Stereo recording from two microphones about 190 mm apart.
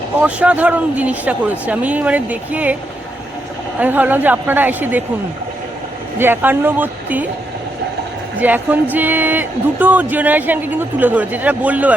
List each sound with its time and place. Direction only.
0.2 s speech: 5° right (ahead or behind)
3.8 s speech: 10° right (ahead or behind)
6.1 s speech: 10° right (ahead or behind)
8.4 s speech: 10° right (ahead or behind)